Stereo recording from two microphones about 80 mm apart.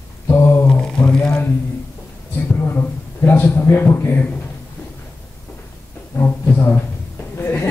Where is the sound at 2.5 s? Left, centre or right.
Left.